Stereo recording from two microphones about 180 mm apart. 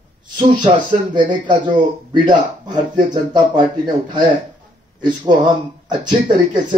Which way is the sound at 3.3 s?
25° right (ahead or behind).